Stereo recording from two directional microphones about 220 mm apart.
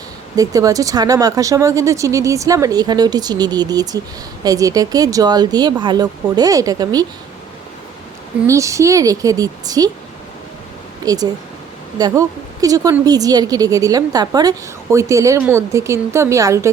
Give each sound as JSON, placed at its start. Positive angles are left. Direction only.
{"t": 0.3, "sound": "a woman's voice", "side_deg": -15}
{"t": 8.4, "sound": "a woman's voice", "side_deg": -15}
{"t": 11.0, "sound": "a woman's voice", "side_deg": -15}